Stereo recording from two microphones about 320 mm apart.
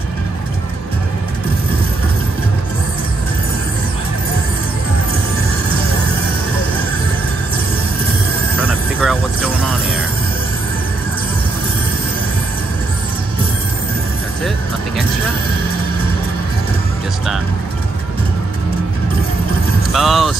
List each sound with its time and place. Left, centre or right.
8.5 s vehicle: centre
19.9 s vehicle: centre